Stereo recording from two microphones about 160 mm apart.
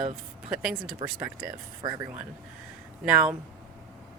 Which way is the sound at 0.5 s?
5° right (ahead or behind).